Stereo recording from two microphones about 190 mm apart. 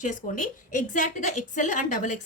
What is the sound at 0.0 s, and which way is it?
A woman's voice, 45° left (ahead or behind).